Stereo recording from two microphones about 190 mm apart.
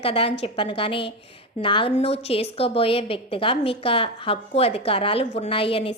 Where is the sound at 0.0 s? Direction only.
30° left (ahead or behind).